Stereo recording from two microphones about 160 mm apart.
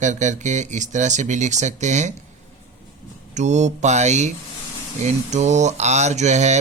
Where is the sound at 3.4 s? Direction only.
45° right (ahead or behind).